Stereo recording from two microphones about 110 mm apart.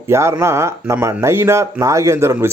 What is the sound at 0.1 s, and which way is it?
Speech, 25° right (ahead or behind).